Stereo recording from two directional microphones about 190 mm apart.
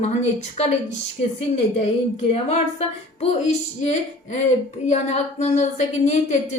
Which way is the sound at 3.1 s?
35° left (ahead or behind).